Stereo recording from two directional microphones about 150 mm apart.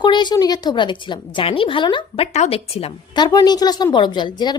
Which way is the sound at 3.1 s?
30° left (ahead or behind).